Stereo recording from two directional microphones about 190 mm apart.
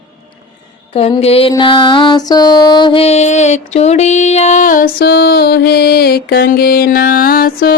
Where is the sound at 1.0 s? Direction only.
30° left (ahead or behind).